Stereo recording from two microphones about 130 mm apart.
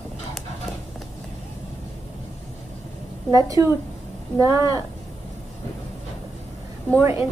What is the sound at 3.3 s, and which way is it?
A woman's voice, 25° right (ahead or behind).